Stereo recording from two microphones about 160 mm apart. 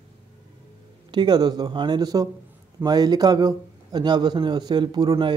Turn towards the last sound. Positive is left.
turn(degrees=-25)  # may be behind; listen again after turning